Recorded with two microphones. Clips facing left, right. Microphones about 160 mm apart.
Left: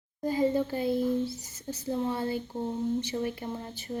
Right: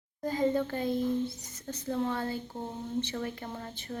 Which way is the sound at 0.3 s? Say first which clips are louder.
Left 2 dB; 10° left (ahead or behind).